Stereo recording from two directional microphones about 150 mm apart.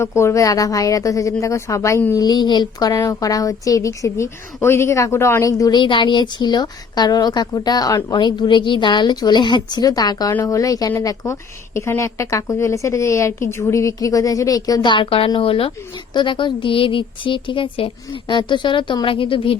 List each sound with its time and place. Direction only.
0.2 s speech: 20° left (ahead or behind); by 19.5 s 35° left (ahead or behind)